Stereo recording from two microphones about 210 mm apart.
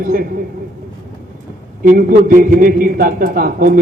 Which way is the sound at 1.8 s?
40° right (ahead or behind).